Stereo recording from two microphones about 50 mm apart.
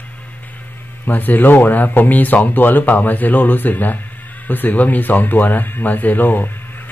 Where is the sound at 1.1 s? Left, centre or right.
Left.